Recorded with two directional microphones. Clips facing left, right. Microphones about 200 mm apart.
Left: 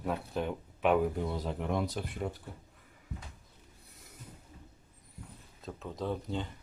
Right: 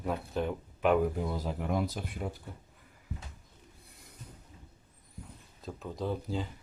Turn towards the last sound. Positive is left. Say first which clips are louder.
# right 1 dB
turn(degrees=-5)  # may be behind; listen again after turning